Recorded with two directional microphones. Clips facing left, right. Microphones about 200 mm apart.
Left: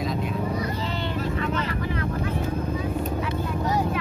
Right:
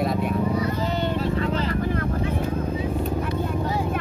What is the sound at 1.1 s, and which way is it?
Vehicle, 30° right (ahead or behind).